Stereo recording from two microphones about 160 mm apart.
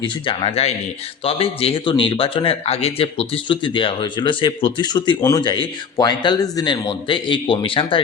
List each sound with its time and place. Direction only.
0.0 s a man's voice: 35° left (ahead or behind)